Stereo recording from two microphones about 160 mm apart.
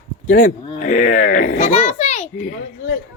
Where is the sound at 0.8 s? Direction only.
55° left (ahead or behind).